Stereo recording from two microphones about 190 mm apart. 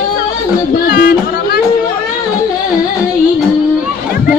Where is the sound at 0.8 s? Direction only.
50° left (ahead or behind).